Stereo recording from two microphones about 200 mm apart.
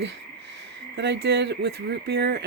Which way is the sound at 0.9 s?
60° right (ahead or behind).